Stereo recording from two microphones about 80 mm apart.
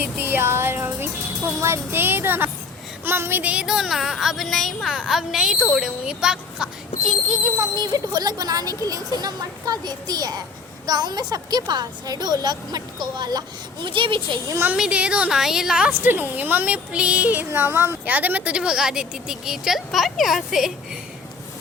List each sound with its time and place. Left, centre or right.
0.2 s speech: right
3.0 s child singing: right
3.4 s speech: centre
7.8 s a woman's voice: right
13.8 s speech: right
14.8 s speech: centre
15.9 s child singing: right
16.4 s speech: right; by 20.7 s centre